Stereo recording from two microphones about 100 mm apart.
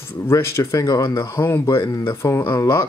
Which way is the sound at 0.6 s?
35° left (ahead or behind).